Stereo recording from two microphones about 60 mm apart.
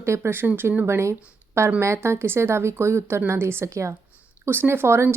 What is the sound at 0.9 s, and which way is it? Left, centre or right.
A woman's voice, right.